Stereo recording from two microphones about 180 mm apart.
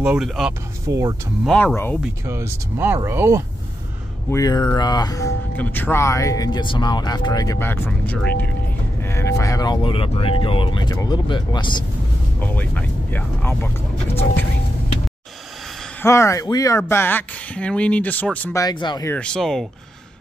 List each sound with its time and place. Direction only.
0.0 s speech: 5° right (ahead or behind)
0.8 s speech: 15° right (ahead or behind)
1.4 s speech: 5° left (ahead or behind)
2.2 s speech: 15° right (ahead or behind)
4.3 s speech: 20° left (ahead or behind)
5.6 s speech: 10° left (ahead or behind); by 11.8 s 25° left (ahead or behind)
12.5 s speech: 10° left (ahead or behind)
16.0 s speech: 15° left (ahead or behind)
19.0 s speech: 5° left (ahead or behind)